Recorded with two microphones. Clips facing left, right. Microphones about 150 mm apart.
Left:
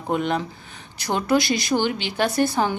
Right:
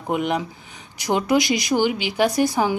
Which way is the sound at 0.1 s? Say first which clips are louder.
Right 1 dB; 15° right (ahead or behind).